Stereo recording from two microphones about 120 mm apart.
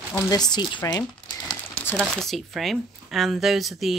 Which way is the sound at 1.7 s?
20° left (ahead or behind).